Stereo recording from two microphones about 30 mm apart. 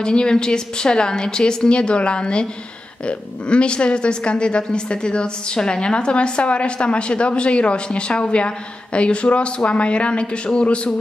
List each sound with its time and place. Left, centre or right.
0.0 s a woman's voice: left